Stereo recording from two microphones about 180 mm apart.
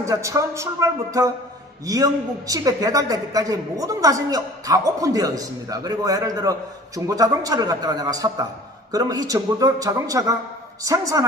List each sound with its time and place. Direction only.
0.0 s speech: 15° right (ahead or behind)
2.5 s a woman's voice: 20° right (ahead or behind)